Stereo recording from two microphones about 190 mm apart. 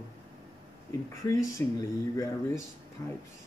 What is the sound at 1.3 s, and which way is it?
Speech, 15° left (ahead or behind).